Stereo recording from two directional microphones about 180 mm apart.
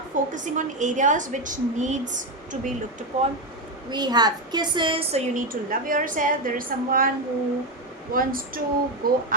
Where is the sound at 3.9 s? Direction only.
25° right (ahead or behind).